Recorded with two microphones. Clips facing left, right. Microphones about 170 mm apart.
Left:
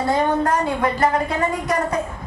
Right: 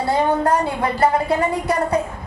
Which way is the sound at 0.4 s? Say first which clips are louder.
Right 1 dB; 30° right (ahead or behind).